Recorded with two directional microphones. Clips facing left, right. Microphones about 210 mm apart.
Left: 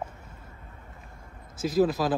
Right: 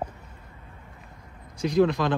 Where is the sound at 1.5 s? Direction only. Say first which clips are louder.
Right 2 dB; 5° left (ahead or behind).